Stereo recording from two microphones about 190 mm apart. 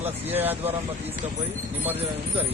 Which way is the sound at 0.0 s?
10° right (ahead or behind).